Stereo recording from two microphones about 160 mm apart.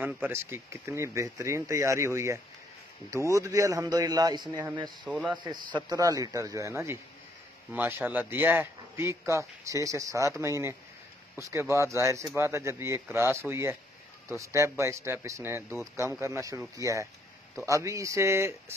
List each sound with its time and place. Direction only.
0.0 s a man's voice: 15° right (ahead or behind)
5.0 s a man's voice: 5° right (ahead or behind)
5.4 s a man's voice: 30° right (ahead or behind)